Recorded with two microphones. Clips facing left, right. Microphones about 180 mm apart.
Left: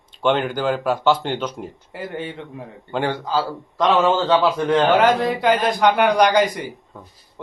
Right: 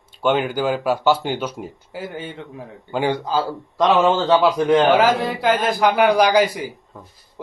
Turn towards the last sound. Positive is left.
turn(degrees=-5)  # may be behind; listen again after turning